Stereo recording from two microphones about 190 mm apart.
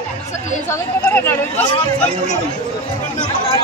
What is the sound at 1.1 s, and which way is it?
Speech, 10° left (ahead or behind).